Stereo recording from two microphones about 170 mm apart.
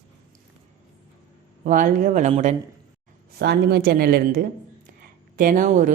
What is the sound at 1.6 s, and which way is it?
Speech, 50° right (ahead or behind).